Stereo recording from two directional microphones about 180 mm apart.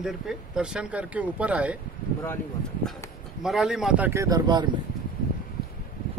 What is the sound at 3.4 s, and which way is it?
Speech, centre (ahead or behind).